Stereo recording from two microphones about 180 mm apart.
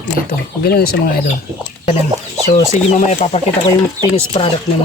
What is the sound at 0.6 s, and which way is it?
Speech, 60° left (ahead or behind).